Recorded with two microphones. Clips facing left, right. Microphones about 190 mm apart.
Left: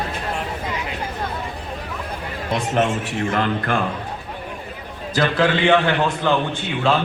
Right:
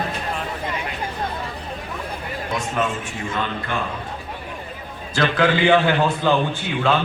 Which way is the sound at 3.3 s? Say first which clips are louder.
Left 4 dB; 90° left.